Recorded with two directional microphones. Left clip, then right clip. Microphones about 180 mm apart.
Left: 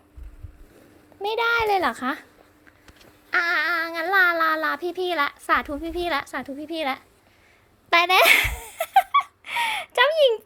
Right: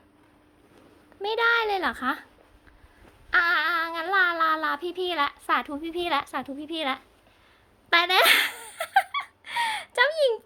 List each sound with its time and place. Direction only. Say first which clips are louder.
1.2 s a child's voice: left 1 dB; 5° left (ahead or behind)
3.2 s a child's voice: even; 20° left (ahead or behind)
7.9 s a sound: left 3 dB; 10° left (ahead or behind)